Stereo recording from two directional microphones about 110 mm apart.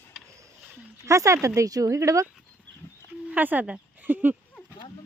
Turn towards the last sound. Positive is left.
turn(degrees=-15)  # may be behind; listen again after turning